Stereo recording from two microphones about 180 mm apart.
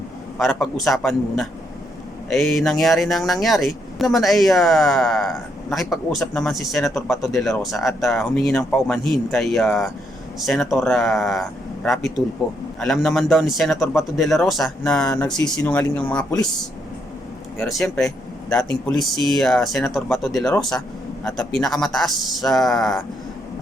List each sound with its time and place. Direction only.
0.3 s speech: centre (ahead or behind)
17.6 s speech: centre (ahead or behind)